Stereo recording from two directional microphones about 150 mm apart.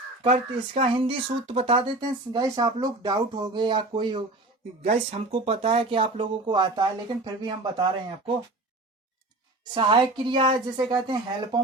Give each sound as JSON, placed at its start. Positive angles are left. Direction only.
{"t": 0.2, "sound": "speech", "side_deg": -40}
{"t": 4.9, "sound": "speech", "side_deg": -40}
{"t": 9.7, "sound": "speech", "side_deg": -30}